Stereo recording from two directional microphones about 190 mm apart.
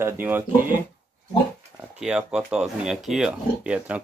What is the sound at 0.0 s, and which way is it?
Speech, 10° right (ahead or behind).